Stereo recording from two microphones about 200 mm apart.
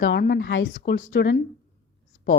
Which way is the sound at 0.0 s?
55° left (ahead or behind).